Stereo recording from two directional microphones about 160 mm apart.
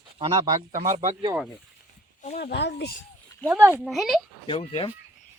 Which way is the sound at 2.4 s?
90° left.